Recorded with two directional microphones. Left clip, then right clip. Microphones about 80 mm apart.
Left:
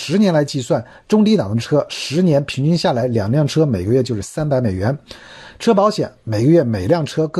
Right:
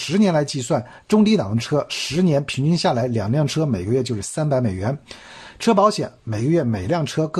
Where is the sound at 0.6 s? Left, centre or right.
Left.